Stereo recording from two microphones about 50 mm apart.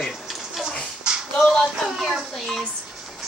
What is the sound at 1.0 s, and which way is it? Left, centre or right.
Speech, centre.